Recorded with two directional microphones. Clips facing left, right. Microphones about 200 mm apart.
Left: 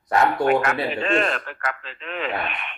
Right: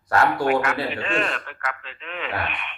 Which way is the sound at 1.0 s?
40° left (ahead or behind).